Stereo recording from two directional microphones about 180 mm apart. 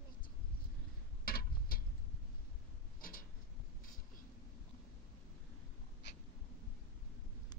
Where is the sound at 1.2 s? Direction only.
55° left (ahead or behind).